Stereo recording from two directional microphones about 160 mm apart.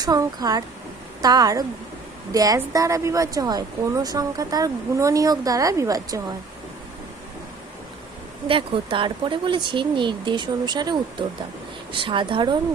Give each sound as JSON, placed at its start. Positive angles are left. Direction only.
{"t": 0.0, "sound": "speech", "side_deg": -25}
{"t": 8.4, "sound": "speech", "side_deg": -35}